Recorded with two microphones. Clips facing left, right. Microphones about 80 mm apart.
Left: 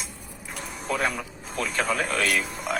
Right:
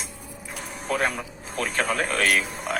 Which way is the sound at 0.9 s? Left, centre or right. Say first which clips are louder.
Right 1 dB; right.